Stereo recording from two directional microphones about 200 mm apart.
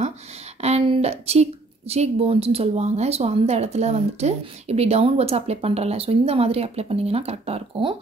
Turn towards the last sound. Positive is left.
turn(degrees=-30)  # may be behind; listen again after turning